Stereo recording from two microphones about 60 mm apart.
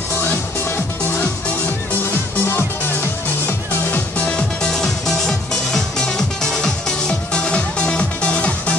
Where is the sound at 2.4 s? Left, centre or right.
Left.